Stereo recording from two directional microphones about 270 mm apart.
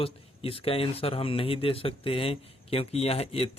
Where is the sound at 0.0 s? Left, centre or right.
Left.